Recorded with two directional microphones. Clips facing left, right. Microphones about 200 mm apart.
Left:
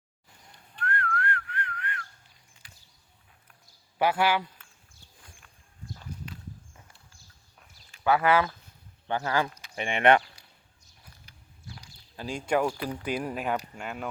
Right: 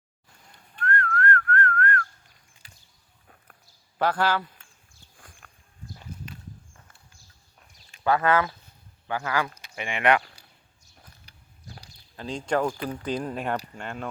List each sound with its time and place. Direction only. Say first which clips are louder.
0.8 s whistling: right 4 dB; 10° left (ahead or behind)
3.9 s speech: even; 10° left (ahead or behind)
8.0 s speech: right 1 dB; 10° left (ahead or behind)
9.0 s speech: even; 25° left (ahead or behind)
11.3 s a sound: left 1 dB; 35° right (ahead or behind)
12.1 s speech: right 1 dB; 10° left (ahead or behind)